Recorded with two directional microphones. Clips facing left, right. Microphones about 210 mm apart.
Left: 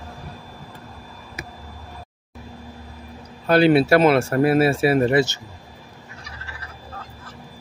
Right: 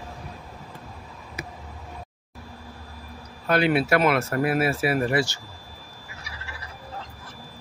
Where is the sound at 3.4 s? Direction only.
30° left (ahead or behind).